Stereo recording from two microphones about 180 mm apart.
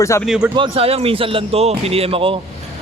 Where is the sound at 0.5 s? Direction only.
30° right (ahead or behind).